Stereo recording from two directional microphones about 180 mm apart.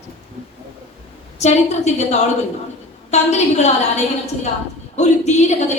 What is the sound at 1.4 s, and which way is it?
A woman's voice, 40° left (ahead or behind).